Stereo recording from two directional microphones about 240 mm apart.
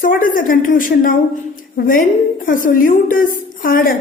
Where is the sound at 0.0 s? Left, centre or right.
Left.